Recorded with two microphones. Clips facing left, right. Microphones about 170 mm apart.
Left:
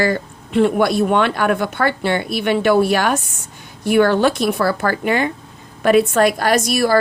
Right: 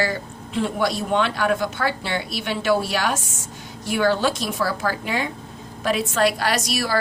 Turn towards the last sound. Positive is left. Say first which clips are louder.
# left 8 dB
turn(degrees=50)  # may be behind; listen again after turning